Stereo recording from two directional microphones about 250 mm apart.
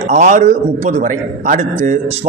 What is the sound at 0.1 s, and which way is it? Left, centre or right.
A man's voice, right.